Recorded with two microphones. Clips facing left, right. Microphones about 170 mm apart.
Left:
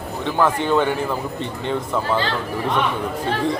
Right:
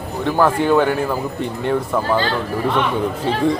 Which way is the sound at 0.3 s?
10° right (ahead or behind).